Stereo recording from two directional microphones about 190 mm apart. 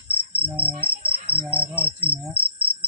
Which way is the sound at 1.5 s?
10° right (ahead or behind).